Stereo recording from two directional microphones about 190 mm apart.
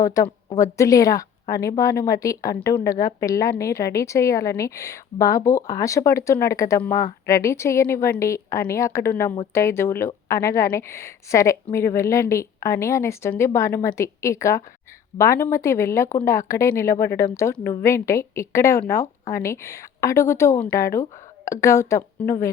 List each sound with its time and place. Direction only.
0.0 s a woman's voice: 15° left (ahead or behind)